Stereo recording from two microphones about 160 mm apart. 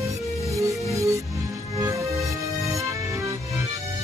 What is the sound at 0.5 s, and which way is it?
Music, 20° right (ahead or behind).